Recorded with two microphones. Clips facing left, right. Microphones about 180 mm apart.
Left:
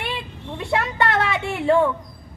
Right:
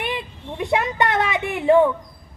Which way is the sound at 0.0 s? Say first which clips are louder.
Right 2 dB; 20° right (ahead or behind).